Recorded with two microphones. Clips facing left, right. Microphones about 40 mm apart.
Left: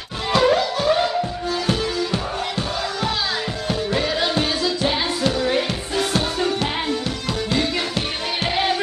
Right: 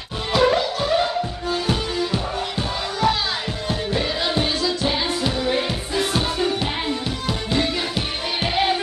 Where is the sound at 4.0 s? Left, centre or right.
Centre.